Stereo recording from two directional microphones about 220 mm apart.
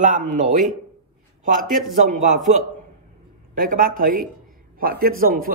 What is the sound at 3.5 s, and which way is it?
A man's voice, 40° right (ahead or behind).